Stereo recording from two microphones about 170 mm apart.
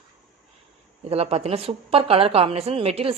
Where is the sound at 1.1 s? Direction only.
35° right (ahead or behind).